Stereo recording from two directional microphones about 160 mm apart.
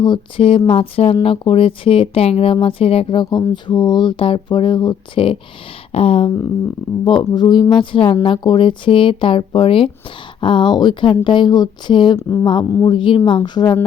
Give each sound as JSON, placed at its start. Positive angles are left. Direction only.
{"t": 0.0, "sound": "speech", "side_deg": 30}